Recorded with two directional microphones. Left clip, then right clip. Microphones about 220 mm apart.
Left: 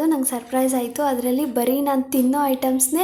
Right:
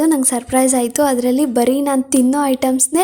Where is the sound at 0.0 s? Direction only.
45° right (ahead or behind).